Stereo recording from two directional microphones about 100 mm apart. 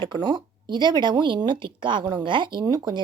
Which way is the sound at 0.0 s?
50° right (ahead or behind).